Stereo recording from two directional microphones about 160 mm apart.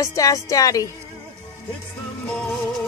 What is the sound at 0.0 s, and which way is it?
Speech, 20° left (ahead or behind).